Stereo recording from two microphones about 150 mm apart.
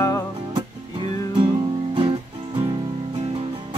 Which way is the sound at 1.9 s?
35° right (ahead or behind).